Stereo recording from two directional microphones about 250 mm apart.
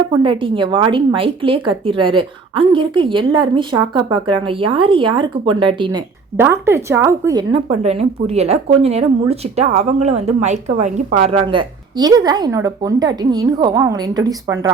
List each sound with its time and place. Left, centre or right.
0.1 s a woman's voice: centre
7.7 s a woman's voice: right